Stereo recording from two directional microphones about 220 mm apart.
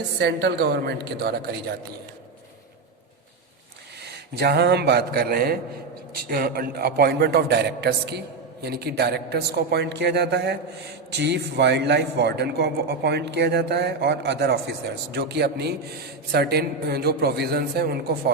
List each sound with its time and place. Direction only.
0.2 s a man's voice: 50° right (ahead or behind)
4.0 s a man's voice: 50° right (ahead or behind)